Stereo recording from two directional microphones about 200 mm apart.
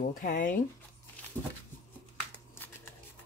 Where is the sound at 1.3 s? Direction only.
20° right (ahead or behind).